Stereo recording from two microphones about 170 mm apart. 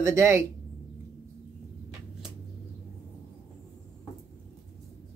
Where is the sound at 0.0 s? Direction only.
15° right (ahead or behind).